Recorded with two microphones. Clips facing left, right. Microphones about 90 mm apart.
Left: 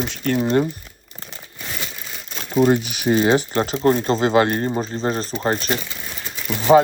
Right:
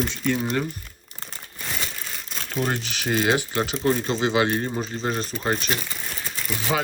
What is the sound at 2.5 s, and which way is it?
Speech, 10° left (ahead or behind).